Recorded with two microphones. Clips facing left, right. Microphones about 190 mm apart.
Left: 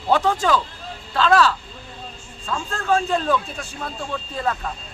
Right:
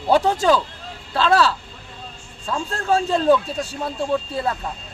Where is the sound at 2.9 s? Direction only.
35° right (ahead or behind).